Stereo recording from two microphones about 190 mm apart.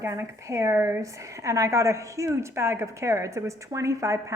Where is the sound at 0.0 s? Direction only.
15° right (ahead or behind).